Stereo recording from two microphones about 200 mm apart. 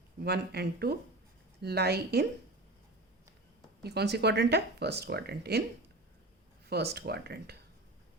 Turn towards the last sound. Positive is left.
turn(degrees=-55)  # may be behind; listen again after turning